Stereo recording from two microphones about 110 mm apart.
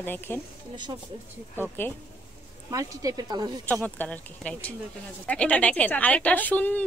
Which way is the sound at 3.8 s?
15° left (ahead or behind).